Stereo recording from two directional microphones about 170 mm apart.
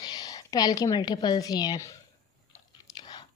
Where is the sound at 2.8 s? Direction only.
20° left (ahead or behind).